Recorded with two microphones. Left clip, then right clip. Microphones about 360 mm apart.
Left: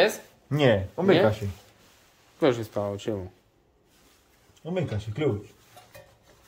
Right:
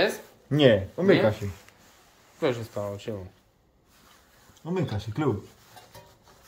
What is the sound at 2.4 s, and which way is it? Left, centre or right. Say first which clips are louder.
Speech: left 3 dB; left.